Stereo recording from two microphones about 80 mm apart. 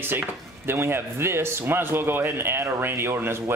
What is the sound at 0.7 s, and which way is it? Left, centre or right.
A man's voice, right.